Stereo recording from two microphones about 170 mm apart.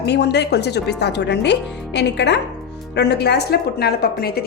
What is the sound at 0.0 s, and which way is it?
Speech, 75° left (ahead or behind).